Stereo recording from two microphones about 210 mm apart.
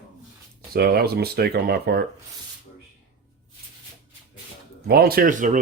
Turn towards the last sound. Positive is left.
turn(degrees=-40)  # may be behind; listen again after turning